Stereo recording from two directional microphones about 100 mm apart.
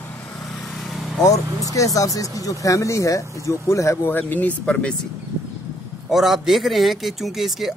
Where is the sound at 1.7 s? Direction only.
35° left (ahead or behind); by 5.0 s 10° left (ahead or behind).